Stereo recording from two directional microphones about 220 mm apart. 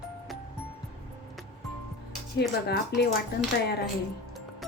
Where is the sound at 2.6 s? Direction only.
45° left (ahead or behind).